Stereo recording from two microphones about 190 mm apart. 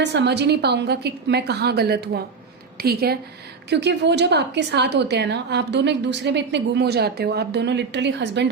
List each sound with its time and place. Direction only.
0.0 s a woman's voice: 65° right (ahead or behind)